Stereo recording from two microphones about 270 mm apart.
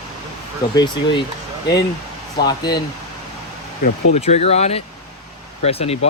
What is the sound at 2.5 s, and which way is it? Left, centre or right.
Speech, centre.